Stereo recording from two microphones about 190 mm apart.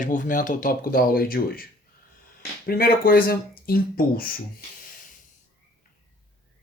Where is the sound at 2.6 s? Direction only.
50° left (ahead or behind).